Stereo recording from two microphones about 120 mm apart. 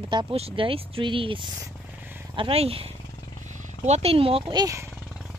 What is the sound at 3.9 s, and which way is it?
Speech, 60° right (ahead or behind).